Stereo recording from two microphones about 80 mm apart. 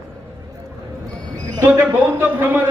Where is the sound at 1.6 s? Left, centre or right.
Right.